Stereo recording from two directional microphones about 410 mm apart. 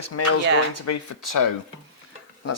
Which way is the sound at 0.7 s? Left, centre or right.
Left.